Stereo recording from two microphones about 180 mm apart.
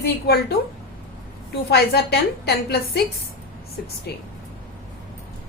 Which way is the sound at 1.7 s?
65° left (ahead or behind).